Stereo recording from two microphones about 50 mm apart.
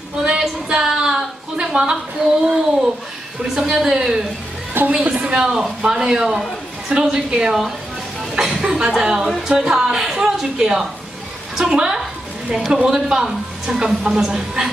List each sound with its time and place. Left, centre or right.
0.2 s a sound: centre
1.7 s speech: centre
4.8 s a woman's voice: right
5.1 s speech: centre